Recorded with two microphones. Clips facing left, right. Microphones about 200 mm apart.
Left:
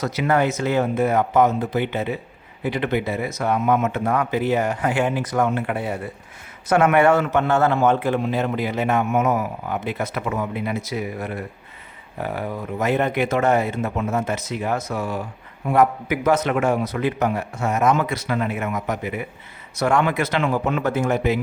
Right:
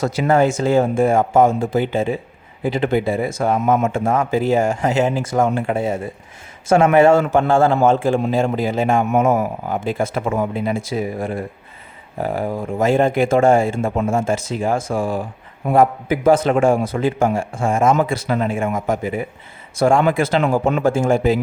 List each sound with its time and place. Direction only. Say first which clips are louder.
0.0 s a man's voice: right 4 dB; 30° right (ahead or behind)